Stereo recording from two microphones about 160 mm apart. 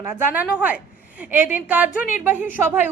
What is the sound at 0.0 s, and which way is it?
A woman's voice, 15° right (ahead or behind).